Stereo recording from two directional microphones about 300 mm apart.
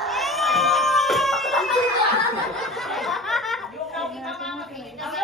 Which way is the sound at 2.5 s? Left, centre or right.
Centre.